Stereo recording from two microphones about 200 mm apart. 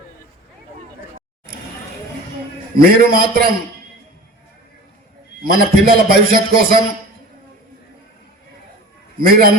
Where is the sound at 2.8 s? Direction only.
45° right (ahead or behind).